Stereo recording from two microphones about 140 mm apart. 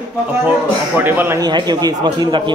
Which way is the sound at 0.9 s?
15° right (ahead or behind).